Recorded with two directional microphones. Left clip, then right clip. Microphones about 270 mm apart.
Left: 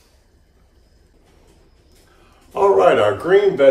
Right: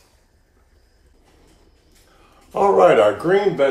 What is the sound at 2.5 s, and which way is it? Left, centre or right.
Speech, centre.